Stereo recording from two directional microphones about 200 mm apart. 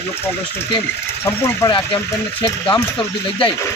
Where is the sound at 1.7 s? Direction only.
25° left (ahead or behind).